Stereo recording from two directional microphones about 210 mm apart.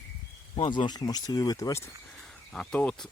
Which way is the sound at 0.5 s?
25° left (ahead or behind).